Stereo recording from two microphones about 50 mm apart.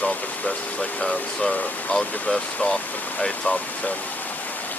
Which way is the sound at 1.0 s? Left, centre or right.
Centre.